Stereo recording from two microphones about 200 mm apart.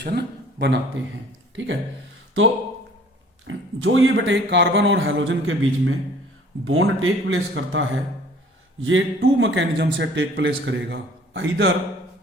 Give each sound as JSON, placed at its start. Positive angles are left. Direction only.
{"t": 0.0, "sound": "speech", "side_deg": -55}
{"t": 3.4, "sound": "a man's voice", "side_deg": -75}
{"t": 6.7, "sound": "speech", "side_deg": -90}